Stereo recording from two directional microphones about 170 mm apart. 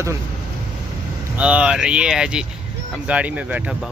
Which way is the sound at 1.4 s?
5° right (ahead or behind).